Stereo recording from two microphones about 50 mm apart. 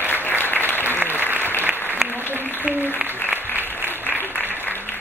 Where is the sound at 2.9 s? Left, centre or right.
Right.